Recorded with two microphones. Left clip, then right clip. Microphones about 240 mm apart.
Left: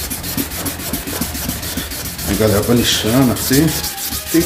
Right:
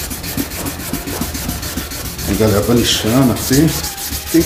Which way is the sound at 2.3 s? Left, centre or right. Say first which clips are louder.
Right 1 dB; centre.